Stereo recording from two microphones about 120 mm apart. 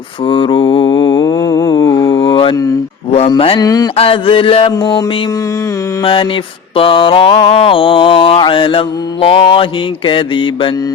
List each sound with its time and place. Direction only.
0.3 s mantra: 45° left (ahead or behind); by 2.1 s 30° left (ahead or behind)
2.1 s mantra: 45° left (ahead or behind)
3.6 s a sound: 30° left (ahead or behind)
3.9 s mantra: 50° left (ahead or behind)
4.8 s music: 40° left (ahead or behind)
6.0 s mantra: 45° left (ahead or behind)